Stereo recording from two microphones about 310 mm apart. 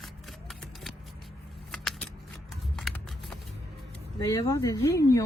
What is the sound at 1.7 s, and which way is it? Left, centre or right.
Keys jangling, centre.